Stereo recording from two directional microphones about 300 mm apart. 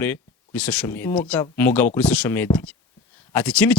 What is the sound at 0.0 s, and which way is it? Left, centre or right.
Speech, centre.